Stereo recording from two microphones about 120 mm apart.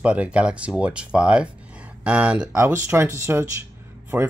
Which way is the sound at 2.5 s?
25° right (ahead or behind).